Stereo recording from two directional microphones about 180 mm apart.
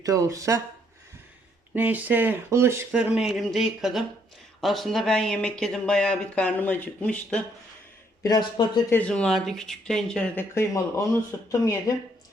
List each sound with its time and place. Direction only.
0.0 s speech: 20° right (ahead or behind)
1.7 s speech: 10° right (ahead or behind)
8.2 s speech: 25° left (ahead or behind)
8.9 s speech: 5° left (ahead or behind)